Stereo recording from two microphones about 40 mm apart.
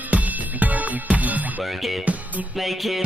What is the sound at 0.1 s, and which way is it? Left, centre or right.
Music, right.